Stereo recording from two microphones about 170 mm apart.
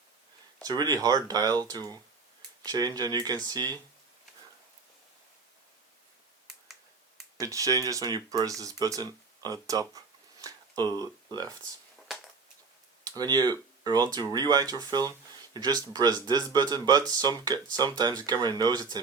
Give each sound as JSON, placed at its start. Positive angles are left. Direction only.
{"t": 0.6, "sound": "speech", "side_deg": -25}
{"t": 7.3, "sound": "speech", "side_deg": -20}
{"t": 13.1, "sound": "speech", "side_deg": -25}